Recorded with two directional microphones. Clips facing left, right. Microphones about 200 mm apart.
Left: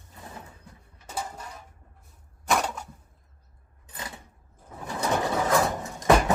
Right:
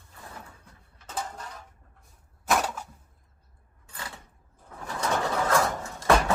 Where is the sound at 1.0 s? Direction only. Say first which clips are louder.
Even; 10° left (ahead or behind).